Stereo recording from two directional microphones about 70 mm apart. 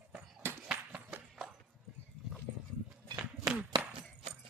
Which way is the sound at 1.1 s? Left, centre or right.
Centre.